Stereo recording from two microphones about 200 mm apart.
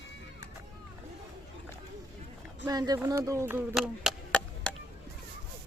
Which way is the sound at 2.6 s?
20° right (ahead or behind).